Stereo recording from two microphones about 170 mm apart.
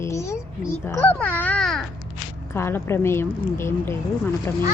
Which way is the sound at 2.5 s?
15° left (ahead or behind).